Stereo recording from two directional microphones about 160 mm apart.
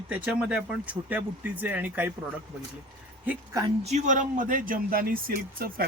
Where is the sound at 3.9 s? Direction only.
50° right (ahead or behind); by 5.8 s 65° right (ahead or behind).